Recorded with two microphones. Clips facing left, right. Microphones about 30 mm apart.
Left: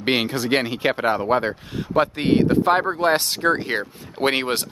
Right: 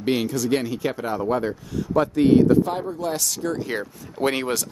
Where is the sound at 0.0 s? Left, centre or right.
Left.